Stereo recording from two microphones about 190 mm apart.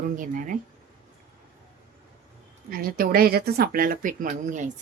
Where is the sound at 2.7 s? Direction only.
50° right (ahead or behind).